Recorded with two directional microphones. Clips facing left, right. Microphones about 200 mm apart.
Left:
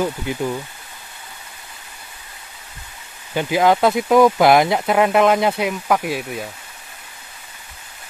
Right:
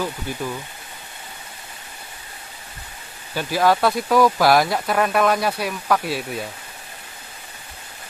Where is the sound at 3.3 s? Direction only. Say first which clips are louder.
Left 3 dB; 20° left (ahead or behind).